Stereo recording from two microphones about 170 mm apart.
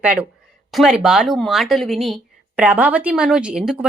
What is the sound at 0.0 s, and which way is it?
A woman's voice, 5° right (ahead or behind).